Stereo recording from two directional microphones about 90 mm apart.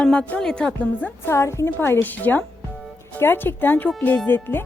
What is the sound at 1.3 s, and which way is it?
A woman's voice, 30° left (ahead or behind).